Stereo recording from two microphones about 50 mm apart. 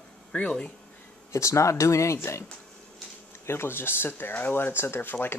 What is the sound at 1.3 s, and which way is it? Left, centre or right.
Speech, left.